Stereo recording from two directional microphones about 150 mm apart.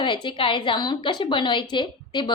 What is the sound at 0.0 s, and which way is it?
A woman's voice, 30° left (ahead or behind).